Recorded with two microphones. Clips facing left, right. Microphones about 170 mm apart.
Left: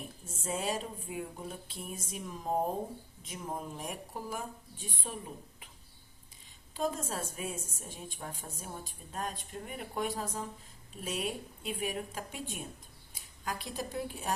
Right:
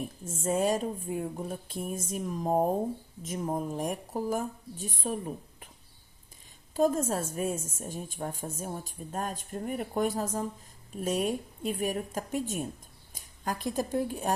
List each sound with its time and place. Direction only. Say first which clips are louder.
0.4 s a woman's voice: right 8 dB; 45° right (ahead or behind)
6.7 s a woman's voice: right 8 dB; 45° right (ahead or behind)